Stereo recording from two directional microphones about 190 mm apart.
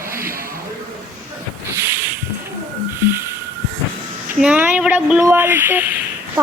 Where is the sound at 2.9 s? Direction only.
10° right (ahead or behind).